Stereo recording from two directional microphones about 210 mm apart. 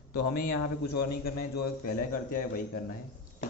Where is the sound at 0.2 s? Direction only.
45° left (ahead or behind).